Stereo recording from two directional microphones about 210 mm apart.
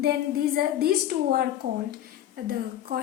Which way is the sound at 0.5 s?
45° right (ahead or behind).